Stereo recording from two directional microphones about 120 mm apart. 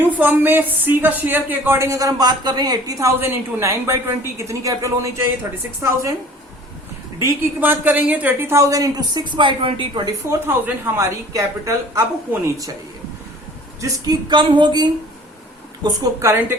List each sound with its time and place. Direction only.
0.0 s speech: 15° right (ahead or behind)
7.2 s speech: 20° right (ahead or behind); by 10.0 s 45° right (ahead or behind)
10.1 s speech: 25° right (ahead or behind)
13.8 s a sound: 30° right (ahead or behind)